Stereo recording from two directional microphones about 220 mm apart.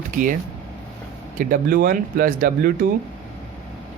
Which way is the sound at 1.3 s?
40° right (ahead or behind).